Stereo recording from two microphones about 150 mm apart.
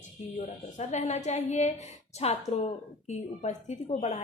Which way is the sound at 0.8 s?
50° left (ahead or behind).